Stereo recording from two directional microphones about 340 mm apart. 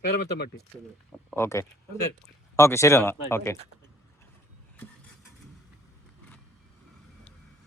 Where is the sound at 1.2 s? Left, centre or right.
Centre.